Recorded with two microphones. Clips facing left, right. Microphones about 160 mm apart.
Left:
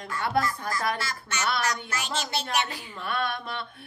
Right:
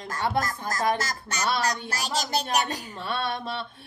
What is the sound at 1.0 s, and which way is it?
A woman's voice, 40° right (ahead or behind).